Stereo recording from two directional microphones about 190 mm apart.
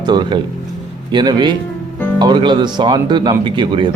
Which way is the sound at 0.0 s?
25° right (ahead or behind).